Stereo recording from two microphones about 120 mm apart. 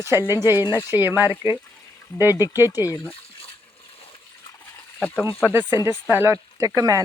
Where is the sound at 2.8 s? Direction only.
20° left (ahead or behind).